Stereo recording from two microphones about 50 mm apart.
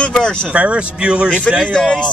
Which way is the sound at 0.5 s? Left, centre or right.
Right.